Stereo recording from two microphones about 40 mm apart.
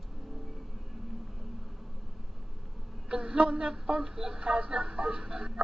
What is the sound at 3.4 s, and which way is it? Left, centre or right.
Speech, right.